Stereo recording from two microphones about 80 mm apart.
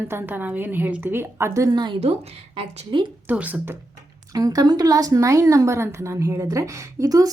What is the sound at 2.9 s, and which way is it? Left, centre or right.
Speech, right.